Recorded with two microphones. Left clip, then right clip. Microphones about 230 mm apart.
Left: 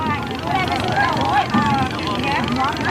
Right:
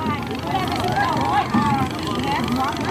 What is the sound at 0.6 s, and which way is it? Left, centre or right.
Vehicle, right.